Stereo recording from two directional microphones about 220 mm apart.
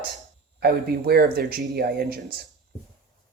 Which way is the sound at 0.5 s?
45° right (ahead or behind).